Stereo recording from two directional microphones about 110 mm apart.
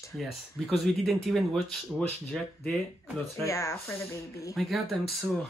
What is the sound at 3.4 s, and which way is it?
Speech, 30° left (ahead or behind).